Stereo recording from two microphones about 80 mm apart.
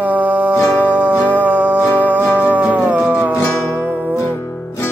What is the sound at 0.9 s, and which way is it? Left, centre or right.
Music, centre.